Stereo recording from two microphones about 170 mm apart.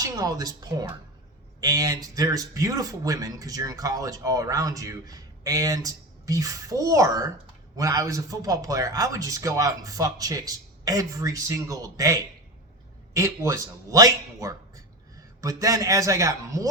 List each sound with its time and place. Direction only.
0.0 s a woman's voice: 20° right (ahead or behind)